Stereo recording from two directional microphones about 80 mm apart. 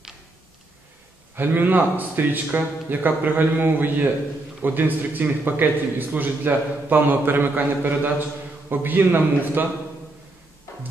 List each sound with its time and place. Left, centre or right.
1.3 s a man's voice: right